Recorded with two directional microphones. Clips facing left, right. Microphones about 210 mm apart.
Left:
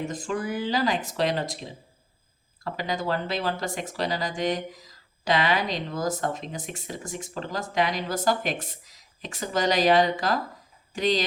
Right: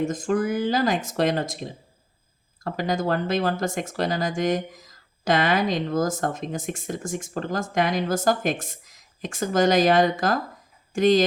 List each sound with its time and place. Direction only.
0.0 s speech: 45° right (ahead or behind)